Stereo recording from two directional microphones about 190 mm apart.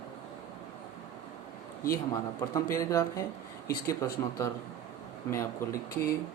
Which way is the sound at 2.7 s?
15° left (ahead or behind).